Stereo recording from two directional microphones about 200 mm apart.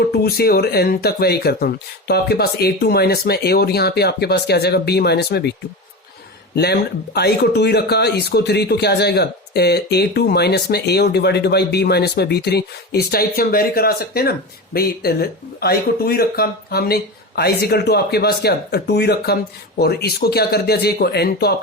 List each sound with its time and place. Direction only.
0.1 s speech: 50° left (ahead or behind)
6.6 s speech: 55° left (ahead or behind)